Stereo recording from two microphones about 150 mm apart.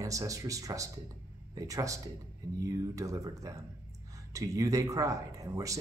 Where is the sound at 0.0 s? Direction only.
20° right (ahead or behind).